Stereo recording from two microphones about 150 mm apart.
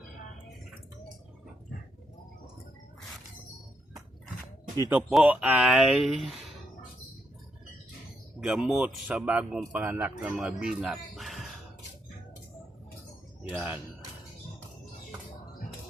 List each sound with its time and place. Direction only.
4.8 s speech: 15° right (ahead or behind)
8.4 s speech: 5° right (ahead or behind)
13.4 s speech: 10° right (ahead or behind)